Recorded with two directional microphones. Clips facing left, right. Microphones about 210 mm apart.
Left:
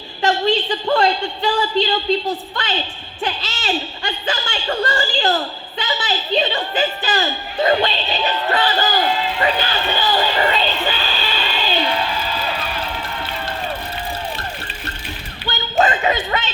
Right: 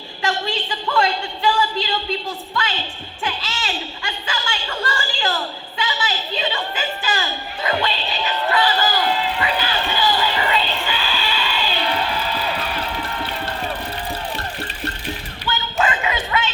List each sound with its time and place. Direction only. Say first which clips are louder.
0.2 s speech: left 7 dB; 35° left (ahead or behind)
9.4 s music: left 3 dB; 35° left (ahead or behind)
15.4 s a sound: left 4 dB; 35° left (ahead or behind)